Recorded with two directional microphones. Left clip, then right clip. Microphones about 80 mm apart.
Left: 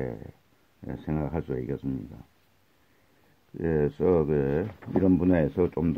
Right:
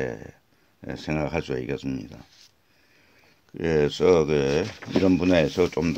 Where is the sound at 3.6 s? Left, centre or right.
Centre.